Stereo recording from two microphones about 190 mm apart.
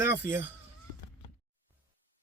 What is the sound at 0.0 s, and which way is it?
Speech, 10° right (ahead or behind).